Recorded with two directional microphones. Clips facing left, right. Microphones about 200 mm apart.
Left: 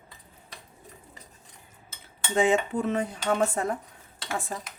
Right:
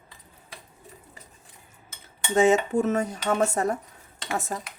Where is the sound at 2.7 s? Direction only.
45° right (ahead or behind).